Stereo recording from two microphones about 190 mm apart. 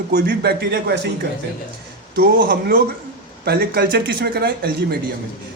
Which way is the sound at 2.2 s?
50° right (ahead or behind).